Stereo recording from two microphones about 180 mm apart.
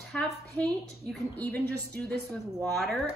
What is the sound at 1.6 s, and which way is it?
Speech, 65° right (ahead or behind).